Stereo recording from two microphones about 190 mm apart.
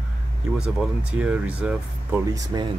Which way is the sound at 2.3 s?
20° right (ahead or behind).